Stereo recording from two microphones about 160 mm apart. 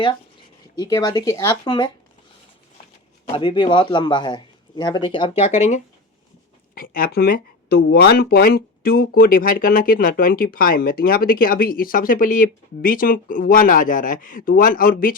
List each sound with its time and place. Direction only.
0.8 s speech: 25° left (ahead or behind)
3.3 s speech: 30° left (ahead or behind)
6.7 s speech: 65° left (ahead or behind)